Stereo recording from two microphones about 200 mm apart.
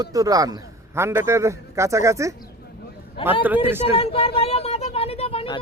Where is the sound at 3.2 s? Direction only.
25° left (ahead or behind).